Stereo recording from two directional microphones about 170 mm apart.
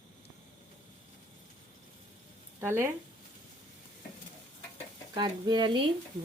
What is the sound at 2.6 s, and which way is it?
Speech, 15° right (ahead or behind).